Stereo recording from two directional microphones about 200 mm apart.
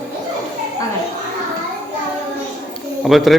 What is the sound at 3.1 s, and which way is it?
Speech, centre (ahead or behind).